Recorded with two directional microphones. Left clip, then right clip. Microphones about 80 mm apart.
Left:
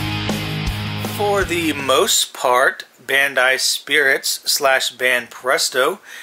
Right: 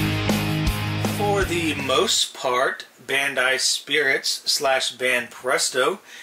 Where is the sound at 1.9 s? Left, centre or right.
Left.